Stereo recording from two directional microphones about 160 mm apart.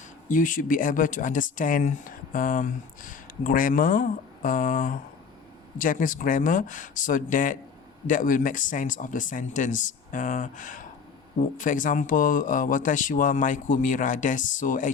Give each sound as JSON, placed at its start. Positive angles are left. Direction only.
{"t": 0.3, "sound": "speech", "side_deg": 55}